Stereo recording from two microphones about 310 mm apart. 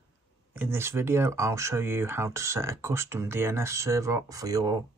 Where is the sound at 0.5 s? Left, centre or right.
Centre.